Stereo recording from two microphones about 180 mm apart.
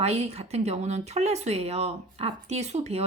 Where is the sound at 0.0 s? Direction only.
35° right (ahead or behind).